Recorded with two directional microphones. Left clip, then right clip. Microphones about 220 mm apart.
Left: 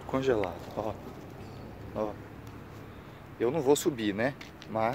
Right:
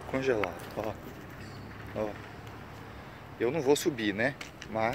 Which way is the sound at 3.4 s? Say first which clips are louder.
Left 1 dB; 10° left (ahead or behind).